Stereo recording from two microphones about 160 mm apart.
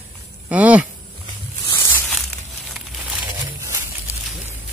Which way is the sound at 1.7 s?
15° left (ahead or behind).